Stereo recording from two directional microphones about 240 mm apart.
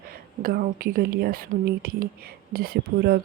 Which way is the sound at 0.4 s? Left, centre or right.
Right.